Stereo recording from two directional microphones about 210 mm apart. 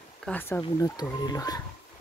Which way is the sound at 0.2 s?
10° left (ahead or behind).